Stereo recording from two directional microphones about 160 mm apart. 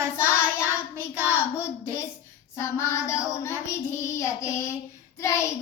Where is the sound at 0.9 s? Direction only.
15° left (ahead or behind).